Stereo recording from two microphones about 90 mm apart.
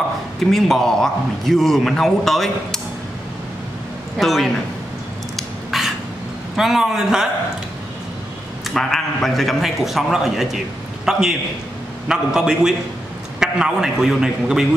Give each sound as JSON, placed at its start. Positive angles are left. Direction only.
{"t": 0.4, "sound": "a man's voice", "side_deg": 5}
{"t": 4.2, "sound": "a man's voice", "side_deg": 0}
{"t": 5.3, "sound": "a sound", "side_deg": 0}
{"t": 6.5, "sound": "a man's voice", "side_deg": -5}
{"t": 8.6, "sound": "a man's voice", "side_deg": 5}